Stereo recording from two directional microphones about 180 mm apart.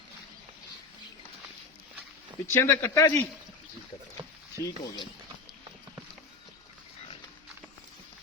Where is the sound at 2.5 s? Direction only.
15° left (ahead or behind).